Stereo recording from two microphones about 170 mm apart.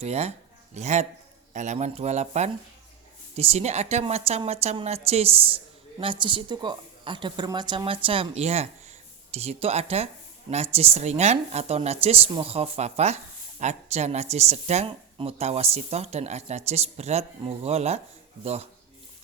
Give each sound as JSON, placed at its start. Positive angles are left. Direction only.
{"t": 0.0, "sound": "a woman's voice", "side_deg": -40}